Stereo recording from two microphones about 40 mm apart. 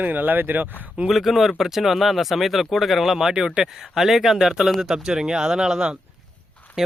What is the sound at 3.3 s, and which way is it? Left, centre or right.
Speech, right.